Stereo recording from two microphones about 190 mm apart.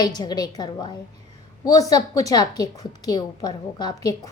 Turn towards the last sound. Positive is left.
turn(degrees=20)  # may be behind; listen again after turning